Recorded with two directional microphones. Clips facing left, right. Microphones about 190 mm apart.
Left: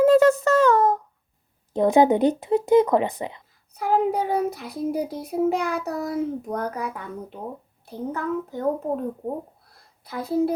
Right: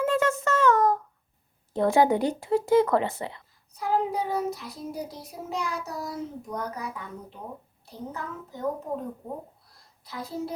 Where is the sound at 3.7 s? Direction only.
55° left (ahead or behind).